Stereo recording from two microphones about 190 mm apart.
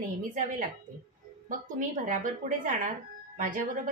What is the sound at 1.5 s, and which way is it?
A woman's voice, 45° right (ahead or behind).